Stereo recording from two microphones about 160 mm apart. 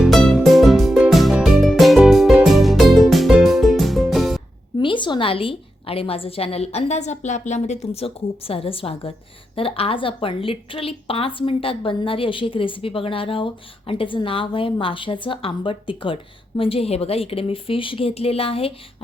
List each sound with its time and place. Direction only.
0.0 s music: centre (ahead or behind)
4.8 s a woman's voice: 30° left (ahead or behind); by 7.8 s 45° left (ahead or behind)
7.9 s a woman's voice: 35° left (ahead or behind)